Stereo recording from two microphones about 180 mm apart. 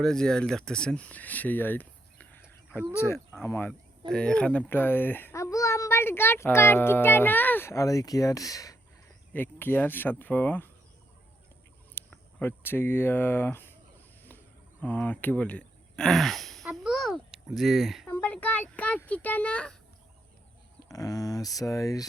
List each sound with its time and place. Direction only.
0.0 s a child's voice: 5° left (ahead or behind)
11.9 s speech: 10° left (ahead or behind)
14.8 s speech: 10° left (ahead or behind)
16.6 s a sound: 5° right (ahead or behind)
18.1 s a sound: 10° left (ahead or behind)
20.8 s speech: 20° left (ahead or behind)